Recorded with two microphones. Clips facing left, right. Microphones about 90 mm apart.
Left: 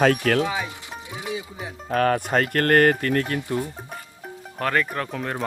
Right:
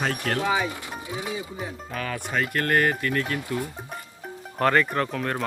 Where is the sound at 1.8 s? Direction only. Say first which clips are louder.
Left 14 dB; 55° left (ahead or behind).